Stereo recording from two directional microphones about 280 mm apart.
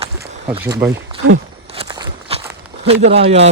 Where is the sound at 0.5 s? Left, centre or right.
Centre.